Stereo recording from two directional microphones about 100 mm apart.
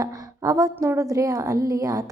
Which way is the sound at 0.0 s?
35° right (ahead or behind).